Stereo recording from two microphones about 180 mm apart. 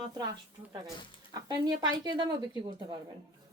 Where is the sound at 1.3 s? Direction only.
20° right (ahead or behind).